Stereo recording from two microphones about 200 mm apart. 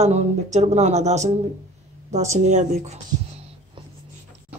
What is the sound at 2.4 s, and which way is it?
Speech, 35° right (ahead or behind).